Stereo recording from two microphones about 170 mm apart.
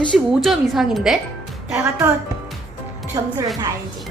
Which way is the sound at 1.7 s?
15° right (ahead or behind).